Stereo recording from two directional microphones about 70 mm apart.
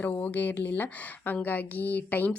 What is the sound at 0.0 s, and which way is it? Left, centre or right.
Speech, left.